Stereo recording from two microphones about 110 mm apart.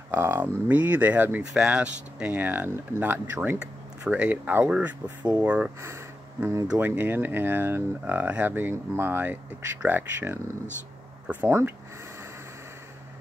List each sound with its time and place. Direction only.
0.1 s speech: 20° right (ahead or behind)
5.8 s speech: 25° right (ahead or behind)